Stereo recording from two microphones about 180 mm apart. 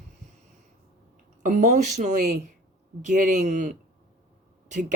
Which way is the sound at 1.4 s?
45° right (ahead or behind).